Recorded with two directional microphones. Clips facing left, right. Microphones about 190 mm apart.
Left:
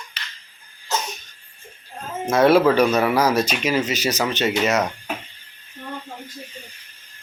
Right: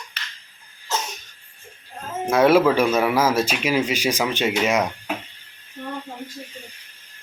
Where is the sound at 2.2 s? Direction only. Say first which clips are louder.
Left 1 dB; 10° right (ahead or behind).